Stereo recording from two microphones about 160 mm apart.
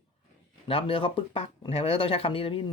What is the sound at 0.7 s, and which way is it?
Speech, 35° left (ahead or behind).